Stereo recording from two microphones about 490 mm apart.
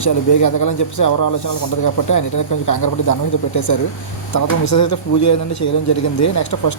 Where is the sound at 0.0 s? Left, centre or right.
Left.